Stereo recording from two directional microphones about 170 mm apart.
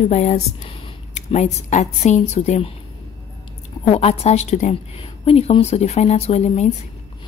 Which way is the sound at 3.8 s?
35° left (ahead or behind).